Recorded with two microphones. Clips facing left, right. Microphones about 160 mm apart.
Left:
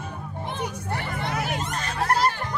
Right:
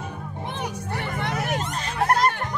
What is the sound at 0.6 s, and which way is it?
Children playing, 60° right (ahead or behind).